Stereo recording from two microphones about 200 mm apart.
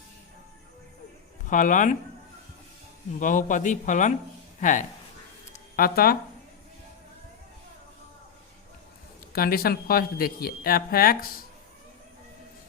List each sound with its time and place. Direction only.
1.5 s speech: 40° left (ahead or behind)
3.2 s speech: 40° left (ahead or behind)
5.5 s a sound: 45° left (ahead or behind)
9.3 s speech: 50° left (ahead or behind)